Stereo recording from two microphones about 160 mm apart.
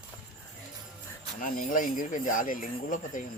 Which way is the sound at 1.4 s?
60° left (ahead or behind).